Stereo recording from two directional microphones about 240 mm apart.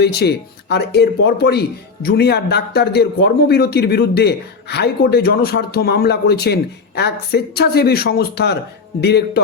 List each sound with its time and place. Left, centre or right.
0.0 s a man's voice: left